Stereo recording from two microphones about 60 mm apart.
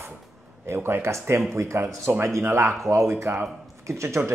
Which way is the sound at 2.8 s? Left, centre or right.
Right.